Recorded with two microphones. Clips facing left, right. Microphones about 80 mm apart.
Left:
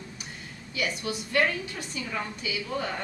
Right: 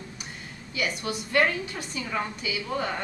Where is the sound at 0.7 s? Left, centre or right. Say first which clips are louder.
Right 1 dB; right.